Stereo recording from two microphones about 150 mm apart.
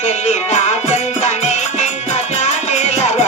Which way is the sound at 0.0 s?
50° left (ahead or behind).